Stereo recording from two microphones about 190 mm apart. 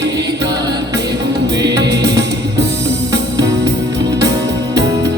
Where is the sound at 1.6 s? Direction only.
20° right (ahead or behind).